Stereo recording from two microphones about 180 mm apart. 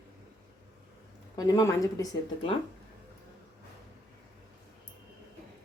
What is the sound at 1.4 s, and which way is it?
Speech, 20° left (ahead or behind).